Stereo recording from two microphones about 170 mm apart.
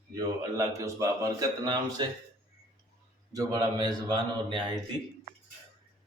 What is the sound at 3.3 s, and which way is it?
A man's voice, 25° right (ahead or behind).